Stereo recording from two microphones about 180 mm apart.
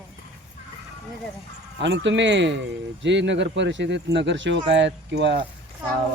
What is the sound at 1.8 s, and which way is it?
Speech, 90° right.